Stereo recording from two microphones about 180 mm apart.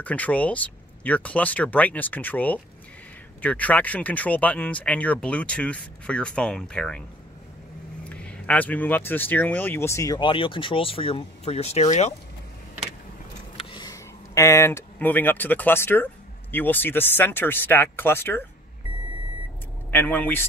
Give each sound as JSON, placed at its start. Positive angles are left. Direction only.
{"t": 0.0, "sound": "speech", "side_deg": 10}
{"t": 8.0, "sound": "speech", "side_deg": 5}
{"t": 13.6, "sound": "speech", "side_deg": 25}
{"t": 19.9, "sound": "speech", "side_deg": 10}